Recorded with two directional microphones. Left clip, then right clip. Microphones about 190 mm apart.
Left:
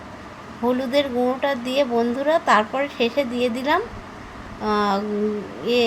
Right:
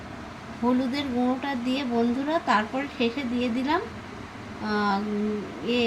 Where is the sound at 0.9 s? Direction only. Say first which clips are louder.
Left 7 dB; 55° left (ahead or behind).